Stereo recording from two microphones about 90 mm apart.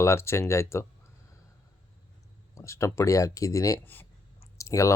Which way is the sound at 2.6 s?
30° left (ahead or behind).